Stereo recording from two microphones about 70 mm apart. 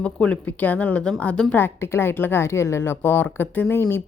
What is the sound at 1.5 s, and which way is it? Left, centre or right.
A woman's voice, left.